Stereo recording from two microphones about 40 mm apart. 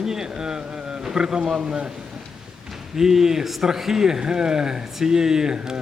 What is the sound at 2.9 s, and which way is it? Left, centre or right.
A man's voice, centre.